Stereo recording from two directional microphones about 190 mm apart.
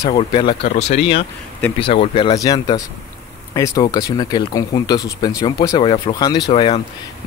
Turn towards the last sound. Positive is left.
turn(degrees=25)  # may be behind; listen again after turning